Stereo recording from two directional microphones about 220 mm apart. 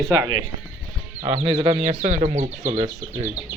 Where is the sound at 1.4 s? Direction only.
25° right (ahead or behind).